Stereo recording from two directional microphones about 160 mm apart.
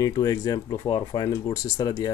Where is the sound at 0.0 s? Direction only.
25° left (ahead or behind).